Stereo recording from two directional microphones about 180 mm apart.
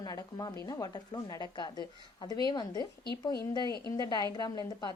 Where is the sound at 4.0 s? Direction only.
20° left (ahead or behind).